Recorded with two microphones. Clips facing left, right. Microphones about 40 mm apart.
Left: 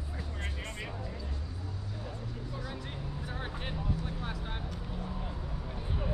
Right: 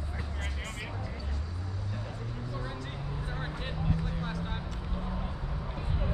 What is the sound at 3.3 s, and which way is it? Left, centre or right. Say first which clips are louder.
Vehicle: even; centre.